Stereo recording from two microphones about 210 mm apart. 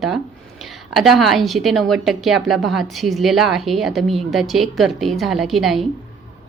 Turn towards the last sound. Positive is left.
turn(degrees=0)  # may be behind; listen again after turning